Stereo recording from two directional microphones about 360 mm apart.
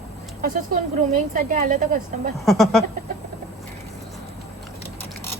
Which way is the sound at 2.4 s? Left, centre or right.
Centre.